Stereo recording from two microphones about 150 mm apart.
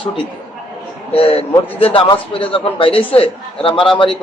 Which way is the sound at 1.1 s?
40° left (ahead or behind).